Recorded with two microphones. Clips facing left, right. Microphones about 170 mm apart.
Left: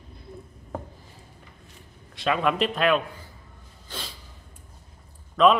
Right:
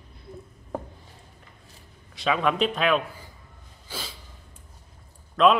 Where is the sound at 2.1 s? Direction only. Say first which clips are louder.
Even; centre (ahead or behind).